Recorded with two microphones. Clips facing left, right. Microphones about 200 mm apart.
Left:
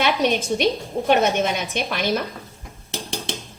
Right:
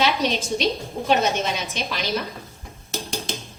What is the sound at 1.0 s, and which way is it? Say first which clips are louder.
A woman's voice: left 3 dB; 55° left (ahead or behind).